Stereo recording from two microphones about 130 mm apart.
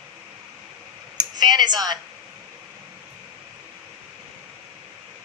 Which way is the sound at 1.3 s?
30° right (ahead or behind).